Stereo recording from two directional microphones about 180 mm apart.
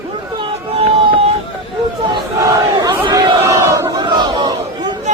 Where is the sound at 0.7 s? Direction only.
30° right (ahead or behind).